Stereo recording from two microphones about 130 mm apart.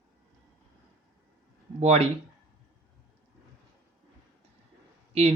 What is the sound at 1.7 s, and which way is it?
Speech, 55° right (ahead or behind).